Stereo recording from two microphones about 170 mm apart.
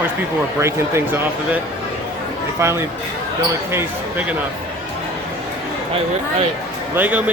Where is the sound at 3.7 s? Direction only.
15° right (ahead or behind).